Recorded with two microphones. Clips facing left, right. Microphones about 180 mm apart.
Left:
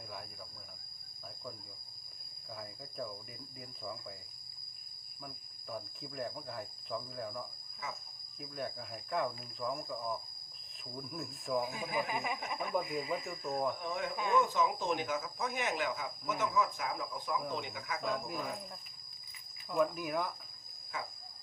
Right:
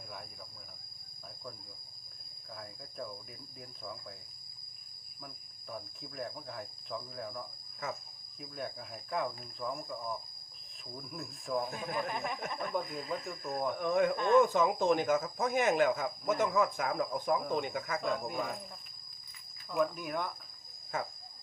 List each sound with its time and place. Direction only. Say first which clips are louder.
5.7 s speech: left 1 dB; centre (ahead or behind)
13.7 s speech: right 8 dB; 55° right (ahead or behind)
18.0 s speech: right 1 dB; centre (ahead or behind)
19.7 s speech: even; 5° left (ahead or behind)
20.9 s speech: right 6 dB; 45° right (ahead or behind)